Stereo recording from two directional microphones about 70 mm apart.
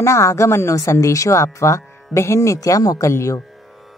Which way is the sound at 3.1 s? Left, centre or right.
Left.